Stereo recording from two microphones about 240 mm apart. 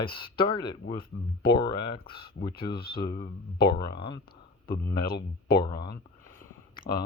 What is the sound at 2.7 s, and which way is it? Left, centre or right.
Speech, left.